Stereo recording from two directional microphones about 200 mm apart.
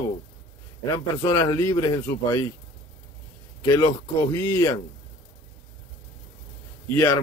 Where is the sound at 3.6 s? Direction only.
15° left (ahead or behind).